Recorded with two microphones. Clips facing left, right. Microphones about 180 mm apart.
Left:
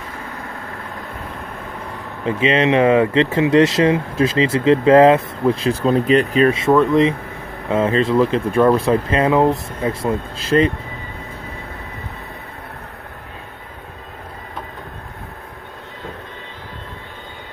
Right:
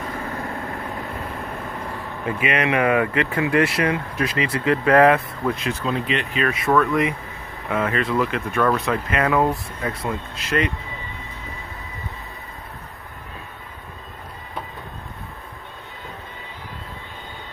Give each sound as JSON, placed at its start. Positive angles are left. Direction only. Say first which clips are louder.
{"t": 2.2, "sound": "speech", "louder": "left 6 dB", "side_deg": 25}